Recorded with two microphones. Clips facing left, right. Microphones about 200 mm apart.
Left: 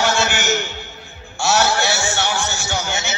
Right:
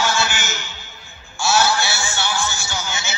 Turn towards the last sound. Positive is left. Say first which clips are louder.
# left 5 dB
turn(degrees=65)  # may be behind; listen again after turning